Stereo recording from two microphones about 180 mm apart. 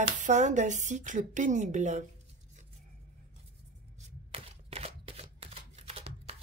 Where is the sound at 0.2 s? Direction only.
40° right (ahead or behind).